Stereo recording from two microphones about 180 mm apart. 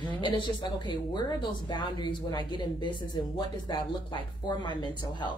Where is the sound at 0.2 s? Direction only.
25° left (ahead or behind).